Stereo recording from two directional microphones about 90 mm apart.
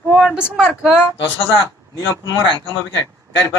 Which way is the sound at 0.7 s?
5° right (ahead or behind).